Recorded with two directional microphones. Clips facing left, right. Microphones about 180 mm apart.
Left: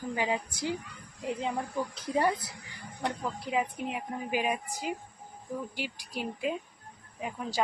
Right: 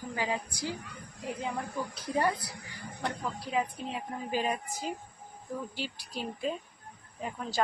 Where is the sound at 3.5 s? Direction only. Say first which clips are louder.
Left 1 dB; 15° left (ahead or behind).